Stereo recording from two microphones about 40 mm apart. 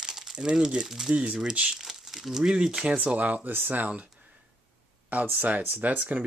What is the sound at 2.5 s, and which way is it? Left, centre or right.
Speech, right.